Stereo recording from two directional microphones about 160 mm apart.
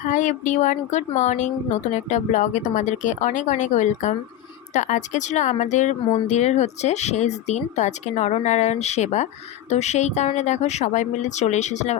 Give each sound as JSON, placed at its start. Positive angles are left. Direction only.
{"t": 0.1, "sound": "a woman's voice", "side_deg": 50}